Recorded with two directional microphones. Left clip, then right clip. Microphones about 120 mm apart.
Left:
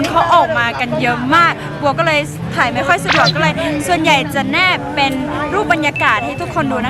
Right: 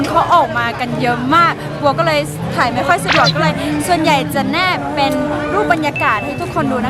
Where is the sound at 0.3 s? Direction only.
5° right (ahead or behind).